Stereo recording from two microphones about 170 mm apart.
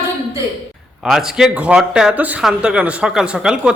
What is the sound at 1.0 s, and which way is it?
A man's voice, centre (ahead or behind).